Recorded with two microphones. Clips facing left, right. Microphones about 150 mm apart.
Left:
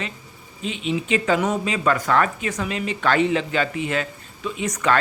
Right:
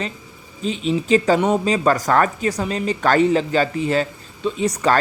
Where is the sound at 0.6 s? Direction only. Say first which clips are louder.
Right 4 dB; 35° right (ahead or behind).